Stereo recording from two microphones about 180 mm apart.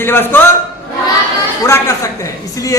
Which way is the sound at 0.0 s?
10° left (ahead or behind).